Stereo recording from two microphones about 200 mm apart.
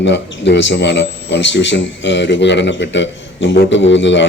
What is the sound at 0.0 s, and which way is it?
Speech, 60° left (ahead or behind).